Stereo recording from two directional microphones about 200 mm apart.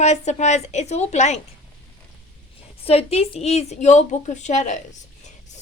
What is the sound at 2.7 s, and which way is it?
A woman's voice, 30° left (ahead or behind).